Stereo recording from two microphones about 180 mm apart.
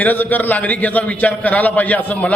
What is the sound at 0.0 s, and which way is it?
A man's voice, 10° left (ahead or behind).